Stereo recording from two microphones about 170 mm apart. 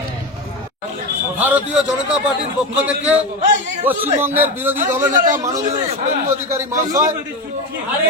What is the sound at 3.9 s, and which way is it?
A man's voice, 10° right (ahead or behind).